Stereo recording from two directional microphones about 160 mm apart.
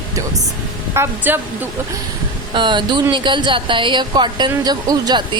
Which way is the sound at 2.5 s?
30° right (ahead or behind).